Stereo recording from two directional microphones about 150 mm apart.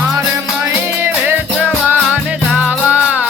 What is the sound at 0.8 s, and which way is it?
Music, 15° right (ahead or behind).